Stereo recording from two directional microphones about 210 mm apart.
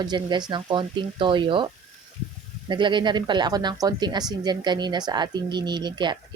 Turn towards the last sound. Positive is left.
turn(degrees=-20)  # may be behind; listen again after turning